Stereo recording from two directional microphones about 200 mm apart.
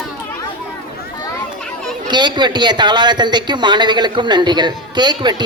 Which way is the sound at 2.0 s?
20° right (ahead or behind).